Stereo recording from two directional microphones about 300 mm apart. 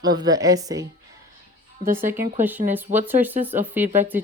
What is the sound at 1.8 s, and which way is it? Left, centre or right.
Speech, right.